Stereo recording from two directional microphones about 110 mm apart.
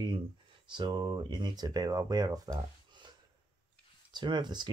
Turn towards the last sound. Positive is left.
turn(degrees=-40)  # may be behind; listen again after turning